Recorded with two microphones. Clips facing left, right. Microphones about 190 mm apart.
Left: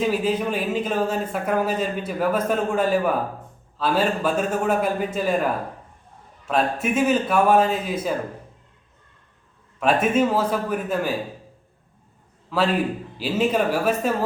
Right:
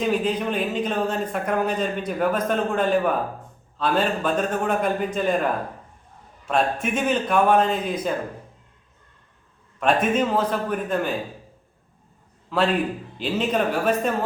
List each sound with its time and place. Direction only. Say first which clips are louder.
0.0 s speech: left 1 dB; 5° left (ahead or behind)
6.5 s speech: left 1 dB; 5° left (ahead or behind)
9.8 s speech: left 1 dB; 5° left (ahead or behind)
12.5 s speech: even; centre (ahead or behind)